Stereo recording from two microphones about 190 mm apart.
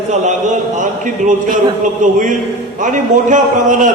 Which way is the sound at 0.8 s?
40° right (ahead or behind).